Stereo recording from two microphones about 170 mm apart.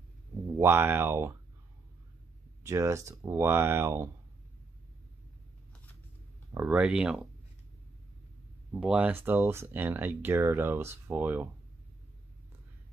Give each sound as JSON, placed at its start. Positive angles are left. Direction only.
{"t": 0.6, "sound": "speech", "side_deg": -15}
{"t": 2.6, "sound": "speech", "side_deg": -15}
{"t": 6.5, "sound": "speech", "side_deg": -10}
{"t": 8.7, "sound": "speech", "side_deg": -5}